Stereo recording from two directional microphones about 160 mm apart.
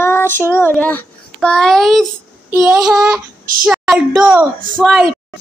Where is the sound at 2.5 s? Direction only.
5° right (ahead or behind).